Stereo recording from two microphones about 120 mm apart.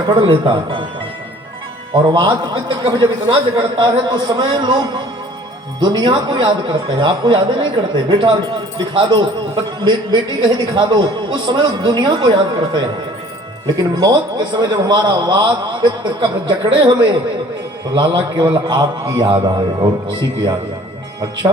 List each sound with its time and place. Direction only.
0.1 s a man's voice: 45° right (ahead or behind)
2.0 s a man's voice: 40° right (ahead or behind)